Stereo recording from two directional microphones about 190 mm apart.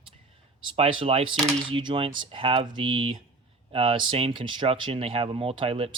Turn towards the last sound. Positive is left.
turn(degrees=-30)  # may be behind; listen again after turning